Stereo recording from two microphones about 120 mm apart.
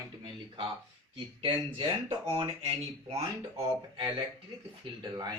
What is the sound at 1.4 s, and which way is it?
Speech, 45° right (ahead or behind).